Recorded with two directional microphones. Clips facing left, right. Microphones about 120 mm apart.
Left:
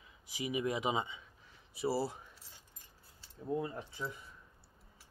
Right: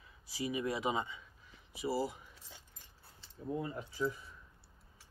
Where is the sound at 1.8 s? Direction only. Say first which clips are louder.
Left 1 dB; 35° left (ahead or behind).